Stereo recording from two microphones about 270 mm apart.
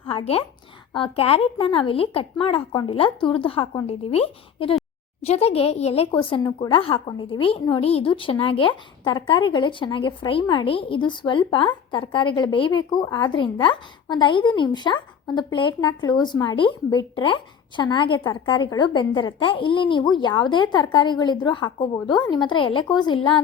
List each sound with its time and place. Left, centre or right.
0.1 s a woman's voice: left